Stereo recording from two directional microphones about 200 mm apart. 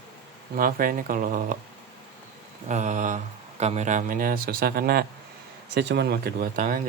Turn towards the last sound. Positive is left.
turn(degrees=-45)  # may be behind; listen again after turning